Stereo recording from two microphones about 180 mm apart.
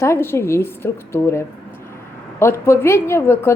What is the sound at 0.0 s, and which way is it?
A woman's voice, 15° left (ahead or behind).